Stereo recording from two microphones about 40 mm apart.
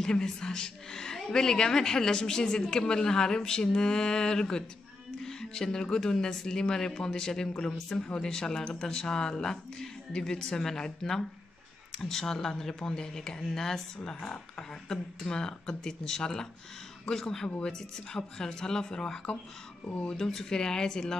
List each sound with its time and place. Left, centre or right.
0.0 s a woman's voice: centre
19.9 s speech: left
20.2 s a woman's voice: centre